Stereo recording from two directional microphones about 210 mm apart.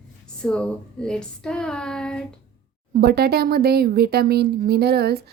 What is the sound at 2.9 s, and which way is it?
Speech, 50° right (ahead or behind).